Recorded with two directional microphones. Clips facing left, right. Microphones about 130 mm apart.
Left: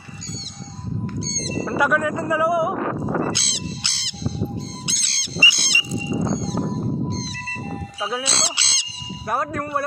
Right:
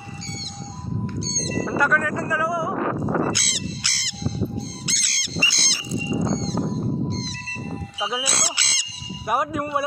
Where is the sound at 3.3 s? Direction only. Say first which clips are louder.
Even; 25° left (ahead or behind).